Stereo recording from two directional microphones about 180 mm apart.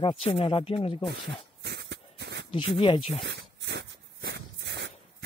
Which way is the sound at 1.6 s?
65° right (ahead or behind).